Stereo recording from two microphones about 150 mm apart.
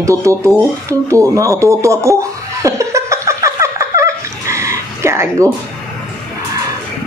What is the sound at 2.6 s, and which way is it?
Laughter, 20° right (ahead or behind).